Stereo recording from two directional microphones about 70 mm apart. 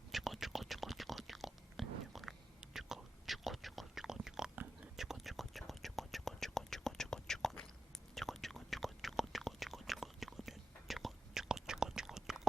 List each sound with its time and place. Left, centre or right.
0.1 s whispering: centre